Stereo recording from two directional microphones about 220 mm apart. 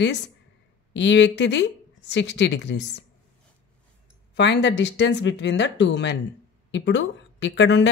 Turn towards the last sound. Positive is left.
turn(degrees=55)  # may be behind; listen again after turning